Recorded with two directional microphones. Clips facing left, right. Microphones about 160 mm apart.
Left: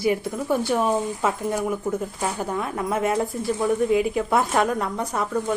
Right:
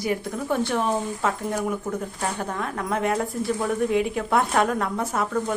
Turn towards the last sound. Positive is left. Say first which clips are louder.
# left 1 dB
turn(degrees=0)  # may be behind; listen again after turning